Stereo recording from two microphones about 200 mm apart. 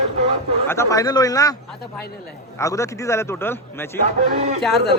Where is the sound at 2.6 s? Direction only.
15° left (ahead or behind).